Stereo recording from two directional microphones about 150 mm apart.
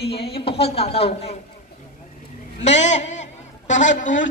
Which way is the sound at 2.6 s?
50° left (ahead or behind).